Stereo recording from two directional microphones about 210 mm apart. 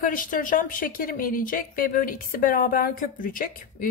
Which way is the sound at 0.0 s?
40° left (ahead or behind).